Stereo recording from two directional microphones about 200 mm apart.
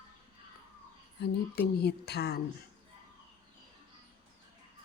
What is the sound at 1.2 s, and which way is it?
Speech, 55° left (ahead or behind).